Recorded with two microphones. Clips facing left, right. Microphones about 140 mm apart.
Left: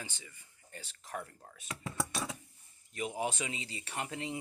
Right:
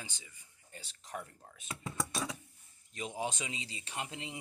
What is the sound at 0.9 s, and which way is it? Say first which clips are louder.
Speech: left 1 dB; 50° left (ahead or behind).